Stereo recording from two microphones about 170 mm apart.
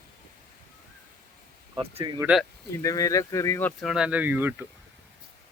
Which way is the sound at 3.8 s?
5° right (ahead or behind).